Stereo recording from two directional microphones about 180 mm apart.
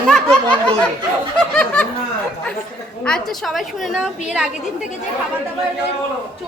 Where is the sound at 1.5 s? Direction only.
5° left (ahead or behind).